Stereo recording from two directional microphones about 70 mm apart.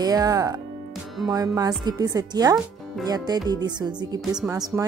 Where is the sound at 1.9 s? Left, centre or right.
Right.